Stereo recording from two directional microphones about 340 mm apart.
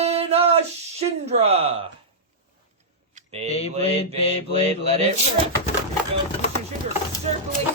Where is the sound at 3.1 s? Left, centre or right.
Centre.